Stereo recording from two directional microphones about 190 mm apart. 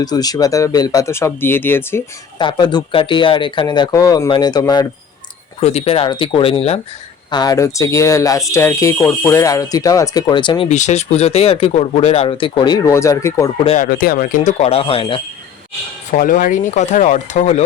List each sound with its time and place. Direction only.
0.0 s speech: 20° left (ahead or behind)
2.4 s speech: 25° left (ahead or behind)
5.5 s speech: 35° left (ahead or behind)
10.7 s speech: 35° left (ahead or behind); by 13.5 s 15° left (ahead or behind)
13.7 s speech: 45° left (ahead or behind)
16.1 s speech: 45° left (ahead or behind)